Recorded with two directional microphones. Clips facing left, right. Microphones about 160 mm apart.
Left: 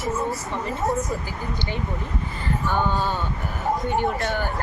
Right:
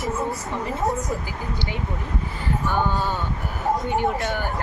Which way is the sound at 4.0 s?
10° right (ahead or behind).